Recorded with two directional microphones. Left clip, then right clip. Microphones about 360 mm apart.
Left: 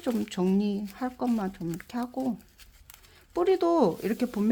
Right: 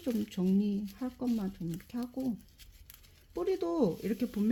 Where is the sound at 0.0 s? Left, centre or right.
Centre.